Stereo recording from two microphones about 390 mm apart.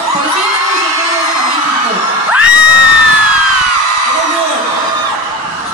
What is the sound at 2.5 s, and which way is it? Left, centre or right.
Crowd, right.